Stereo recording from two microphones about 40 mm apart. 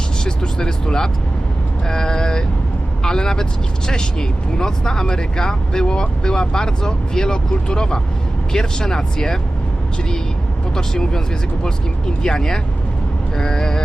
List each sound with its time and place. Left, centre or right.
0.3 s speech: centre
10.8 s speech: centre